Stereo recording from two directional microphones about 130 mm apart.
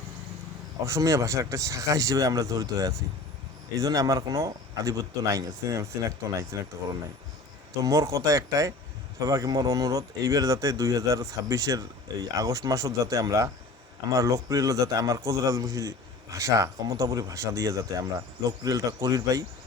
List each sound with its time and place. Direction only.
0.9 s speech: 25° right (ahead or behind)
7.9 s speech: 25° right (ahead or behind)